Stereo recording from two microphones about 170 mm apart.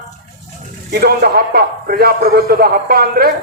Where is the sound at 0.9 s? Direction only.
65° right (ahead or behind).